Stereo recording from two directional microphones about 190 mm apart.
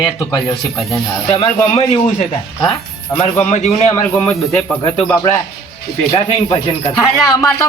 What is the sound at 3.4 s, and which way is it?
Speech, 35° left (ahead or behind).